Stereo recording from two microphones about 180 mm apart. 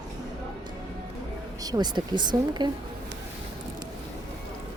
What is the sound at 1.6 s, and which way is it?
Speech, 20° right (ahead or behind).